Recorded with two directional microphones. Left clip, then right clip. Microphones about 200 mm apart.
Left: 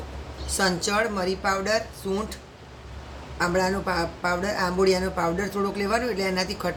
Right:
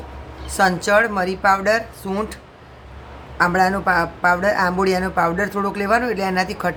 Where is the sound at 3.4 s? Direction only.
35° right (ahead or behind).